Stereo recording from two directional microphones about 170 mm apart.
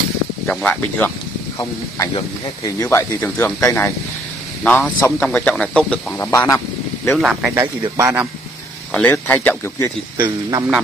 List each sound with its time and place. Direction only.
0.5 s speech: 5° left (ahead or behind)
1.6 s speech: 20° left (ahead or behind)
7.1 s speech: 5° right (ahead or behind)
7.5 s speech: 20° right (ahead or behind)
8.9 s speech: 10° left (ahead or behind)
10.1 s speech: 25° right (ahead or behind)